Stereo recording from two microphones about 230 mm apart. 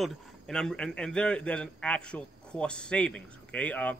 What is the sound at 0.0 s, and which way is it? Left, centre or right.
A man's voice, centre.